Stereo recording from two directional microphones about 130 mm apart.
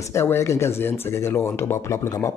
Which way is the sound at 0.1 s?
20° left (ahead or behind).